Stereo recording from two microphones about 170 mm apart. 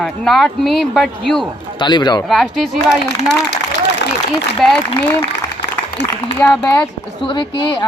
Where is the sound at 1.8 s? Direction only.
25° left (ahead or behind).